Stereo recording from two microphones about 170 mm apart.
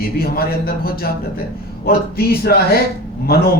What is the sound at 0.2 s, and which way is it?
Speech, 60° left (ahead or behind).